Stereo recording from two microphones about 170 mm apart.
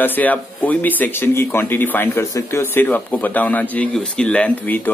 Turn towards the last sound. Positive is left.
turn(degrees=10)  # may be behind; listen again after turning